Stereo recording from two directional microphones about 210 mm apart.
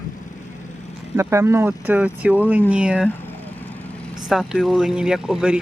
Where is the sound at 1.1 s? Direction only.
15° right (ahead or behind).